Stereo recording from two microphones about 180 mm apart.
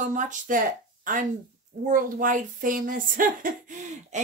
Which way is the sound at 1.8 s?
45° right (ahead or behind).